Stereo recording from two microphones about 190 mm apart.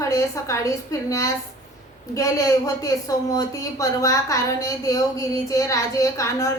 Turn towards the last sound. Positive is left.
turn(degrees=15)  # may be behind; listen again after turning